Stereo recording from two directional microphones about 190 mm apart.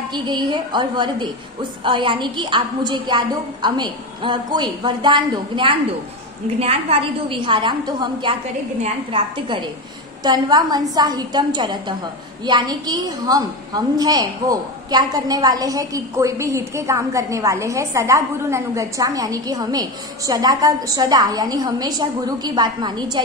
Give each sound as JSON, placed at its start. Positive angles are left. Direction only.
{"t": 0.1, "sound": "a woman's voice", "side_deg": -25}